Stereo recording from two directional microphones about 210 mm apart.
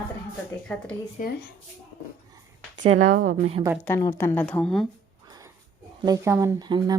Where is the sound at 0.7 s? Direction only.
5° left (ahead or behind).